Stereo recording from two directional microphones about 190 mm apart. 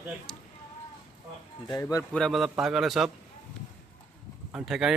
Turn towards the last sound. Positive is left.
turn(degrees=0)  # may be behind; listen again after turning